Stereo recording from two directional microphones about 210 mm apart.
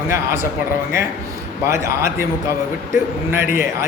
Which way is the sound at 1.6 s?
15° right (ahead or behind).